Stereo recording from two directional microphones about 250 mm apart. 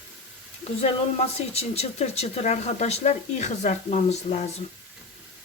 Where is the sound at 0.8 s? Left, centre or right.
Left.